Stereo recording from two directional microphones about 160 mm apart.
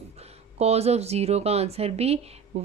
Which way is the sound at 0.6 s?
40° right (ahead or behind).